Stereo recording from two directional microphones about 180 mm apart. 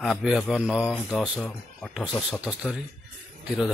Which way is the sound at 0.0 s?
Centre (ahead or behind).